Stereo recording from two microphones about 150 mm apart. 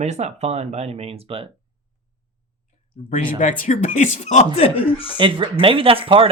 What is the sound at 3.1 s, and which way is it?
Speech, 60° left (ahead or behind).